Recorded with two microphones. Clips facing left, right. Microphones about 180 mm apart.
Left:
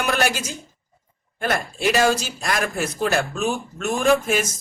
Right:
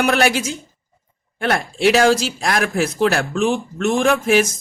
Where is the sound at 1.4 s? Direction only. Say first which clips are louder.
Right 5 dB; 80° right.